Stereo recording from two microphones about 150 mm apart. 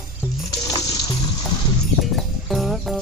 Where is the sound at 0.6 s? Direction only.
25° left (ahead or behind).